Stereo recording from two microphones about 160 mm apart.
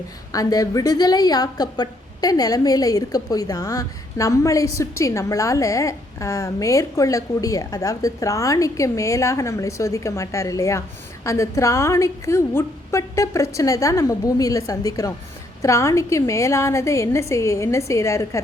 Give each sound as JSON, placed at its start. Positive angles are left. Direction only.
{"t": 0.3, "sound": "a woman's voice", "side_deg": 20}